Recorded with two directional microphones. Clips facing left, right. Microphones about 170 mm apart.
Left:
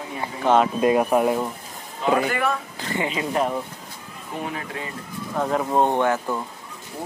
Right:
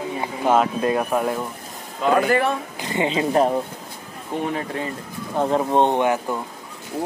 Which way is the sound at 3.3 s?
35° right (ahead or behind).